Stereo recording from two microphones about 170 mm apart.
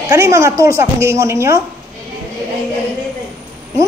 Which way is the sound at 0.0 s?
20° right (ahead or behind).